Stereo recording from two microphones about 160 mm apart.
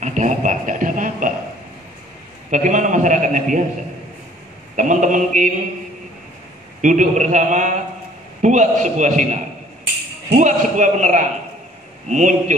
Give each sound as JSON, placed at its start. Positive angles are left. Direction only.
{"t": 0.0, "sound": "a sound", "side_deg": -50}
{"t": 2.5, "sound": "a man's voice", "side_deg": -50}
{"t": 4.7, "sound": "a man's voice", "side_deg": -50}
{"t": 6.8, "sound": "a man's voice", "side_deg": -50}